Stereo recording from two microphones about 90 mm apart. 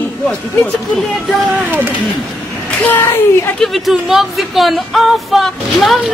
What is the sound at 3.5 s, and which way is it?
Speech, centre (ahead or behind).